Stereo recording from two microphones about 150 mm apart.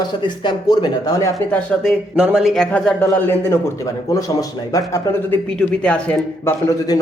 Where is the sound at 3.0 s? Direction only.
15° left (ahead or behind).